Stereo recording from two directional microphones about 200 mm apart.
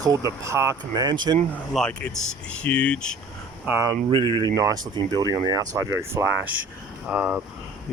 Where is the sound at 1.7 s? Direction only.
5° left (ahead or behind).